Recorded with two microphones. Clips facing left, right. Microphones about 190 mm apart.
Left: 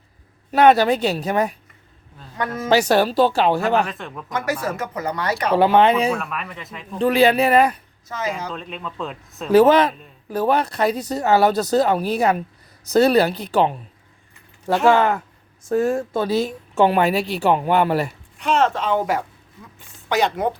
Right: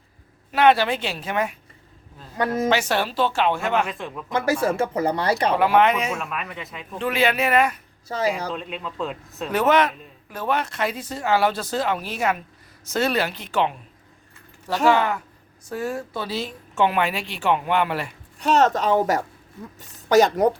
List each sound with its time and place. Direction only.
0.5 s speech: 40° left (ahead or behind)
2.6 s speech: 40° left (ahead or behind)
3.8 s a man's voice: centre (ahead or behind)
4.3 s speech: 30° right (ahead or behind)
5.5 s speech: 30° left (ahead or behind)
6.1 s a man's voice: centre (ahead or behind)
7.0 s speech: 35° left (ahead or behind)
8.0 s speech: 35° right (ahead or behind)
8.5 s a man's voice: centre (ahead or behind)
9.5 s speech: 30° left (ahead or behind)
14.7 s speech: 45° left (ahead or behind)
18.3 s speech: 40° right (ahead or behind)